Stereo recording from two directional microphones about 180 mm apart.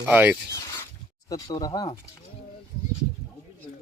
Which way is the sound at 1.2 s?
20° left (ahead or behind).